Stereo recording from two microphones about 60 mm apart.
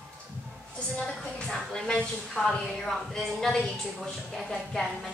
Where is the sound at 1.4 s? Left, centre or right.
Centre.